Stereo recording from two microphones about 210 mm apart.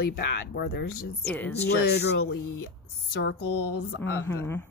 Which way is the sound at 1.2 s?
10° left (ahead or behind).